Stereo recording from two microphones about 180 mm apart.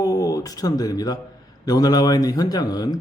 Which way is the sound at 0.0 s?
20° left (ahead or behind).